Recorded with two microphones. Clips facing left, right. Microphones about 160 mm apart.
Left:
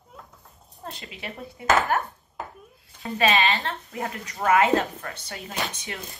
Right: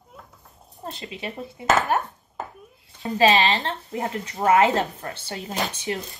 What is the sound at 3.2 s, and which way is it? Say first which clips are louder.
Speech: right 4 dB; 30° right (ahead or behind).